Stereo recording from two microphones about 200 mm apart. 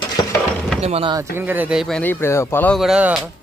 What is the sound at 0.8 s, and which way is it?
Speech, 30° right (ahead or behind).